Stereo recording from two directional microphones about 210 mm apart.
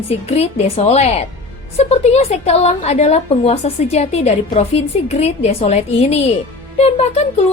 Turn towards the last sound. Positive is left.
turn(degrees=30)  # may be behind; listen again after turning